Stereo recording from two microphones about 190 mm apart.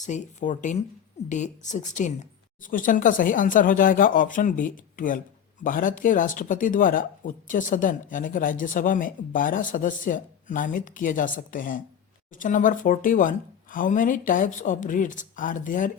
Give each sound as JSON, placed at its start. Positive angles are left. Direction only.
{"t": 0.0, "sound": "speech", "side_deg": 40}